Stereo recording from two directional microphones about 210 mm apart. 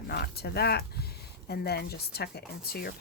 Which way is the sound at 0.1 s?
50° left (ahead or behind).